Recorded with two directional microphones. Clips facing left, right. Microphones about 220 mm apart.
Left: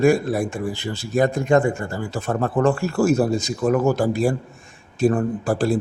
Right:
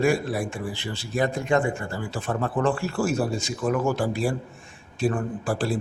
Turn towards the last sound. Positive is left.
turn(degrees=40)  # may be behind; listen again after turning